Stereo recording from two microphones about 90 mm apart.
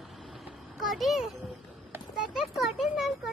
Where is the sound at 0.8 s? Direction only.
Centre (ahead or behind).